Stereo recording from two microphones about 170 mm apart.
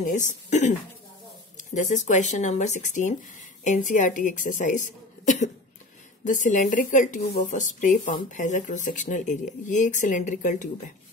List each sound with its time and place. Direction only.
0.0 s speech: 45° left (ahead or behind)